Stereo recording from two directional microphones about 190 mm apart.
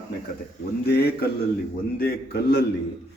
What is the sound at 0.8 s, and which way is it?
A man's voice, 55° left (ahead or behind).